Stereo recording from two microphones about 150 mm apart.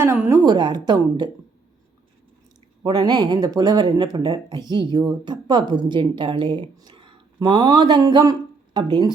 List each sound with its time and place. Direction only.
0.0 s speech: 20° right (ahead or behind)
2.8 s speech: 30° right (ahead or behind)